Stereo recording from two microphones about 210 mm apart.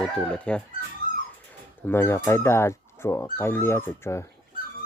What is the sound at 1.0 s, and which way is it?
Dog, 40° left (ahead or behind).